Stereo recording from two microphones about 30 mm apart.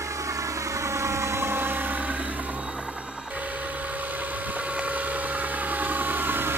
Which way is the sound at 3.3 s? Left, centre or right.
Right.